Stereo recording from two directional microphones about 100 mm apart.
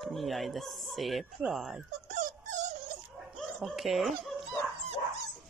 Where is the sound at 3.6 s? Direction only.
Centre (ahead or behind).